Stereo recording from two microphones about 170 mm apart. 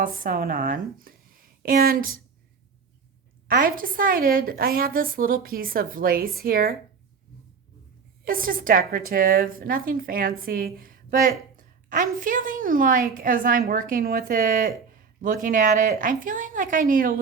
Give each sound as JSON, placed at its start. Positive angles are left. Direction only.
{"t": 0.0, "sound": "a woman's voice", "side_deg": -55}
{"t": 3.5, "sound": "a woman's voice", "side_deg": -55}
{"t": 8.2, "sound": "a woman's voice", "side_deg": -55}